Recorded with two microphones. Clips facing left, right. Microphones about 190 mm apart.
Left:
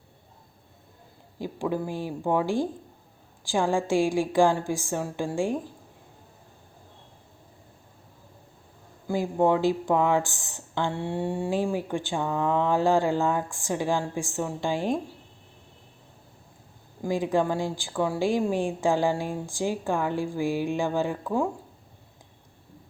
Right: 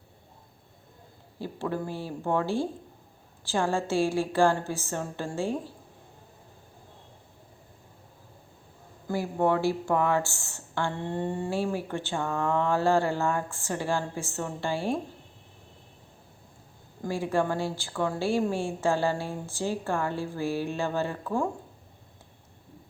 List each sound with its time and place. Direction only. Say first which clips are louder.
1.4 s speech: left 3 dB; 15° left (ahead or behind)
9.0 s speech: left 3 dB; 15° left (ahead or behind)
17.0 s speech: left 3 dB; 15° left (ahead or behind)